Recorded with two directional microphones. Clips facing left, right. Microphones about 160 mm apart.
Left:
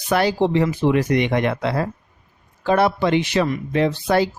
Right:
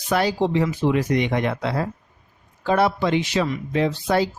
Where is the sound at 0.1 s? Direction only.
65° left (ahead or behind).